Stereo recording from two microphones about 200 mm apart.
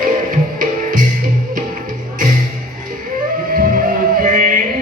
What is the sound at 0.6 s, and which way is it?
Music, 40° right (ahead or behind).